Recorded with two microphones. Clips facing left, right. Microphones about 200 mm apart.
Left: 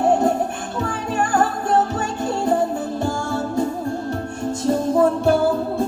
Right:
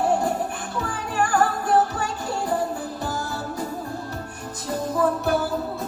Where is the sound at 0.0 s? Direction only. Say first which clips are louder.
Left 5 dB; 20° left (ahead or behind).